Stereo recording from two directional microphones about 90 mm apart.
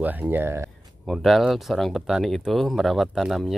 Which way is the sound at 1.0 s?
Centre (ahead or behind).